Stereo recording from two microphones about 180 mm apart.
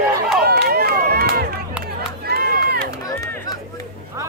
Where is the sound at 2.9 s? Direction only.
20° left (ahead or behind).